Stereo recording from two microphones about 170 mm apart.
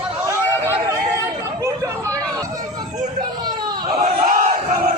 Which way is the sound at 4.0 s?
50° right (ahead or behind).